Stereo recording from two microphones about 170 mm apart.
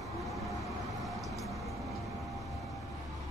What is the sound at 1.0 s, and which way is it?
Vehicle, centre (ahead or behind).